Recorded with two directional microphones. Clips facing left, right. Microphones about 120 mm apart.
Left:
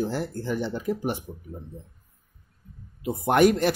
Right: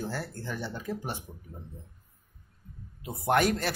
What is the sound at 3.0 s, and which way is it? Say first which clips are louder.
Speech: left 6 dB; 15° left (ahead or behind).